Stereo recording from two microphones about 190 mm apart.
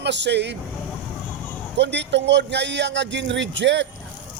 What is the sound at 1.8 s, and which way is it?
Speech, 65° right (ahead or behind).